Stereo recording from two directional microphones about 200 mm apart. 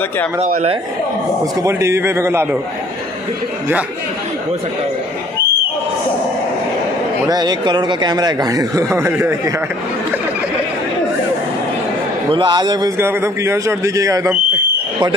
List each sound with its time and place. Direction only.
0.4 s speech: 35° right (ahead or behind)
1.4 s a man's voice: 15° right (ahead or behind)
7.2 s speech: 20° right (ahead or behind)
12.3 s a man's voice: 25° right (ahead or behind)